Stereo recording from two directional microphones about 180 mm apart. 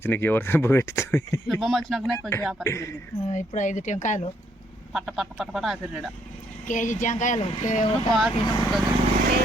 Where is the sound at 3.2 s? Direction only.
45° left (ahead or behind).